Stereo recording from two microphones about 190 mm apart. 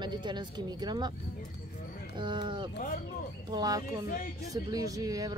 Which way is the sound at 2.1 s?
25° right (ahead or behind).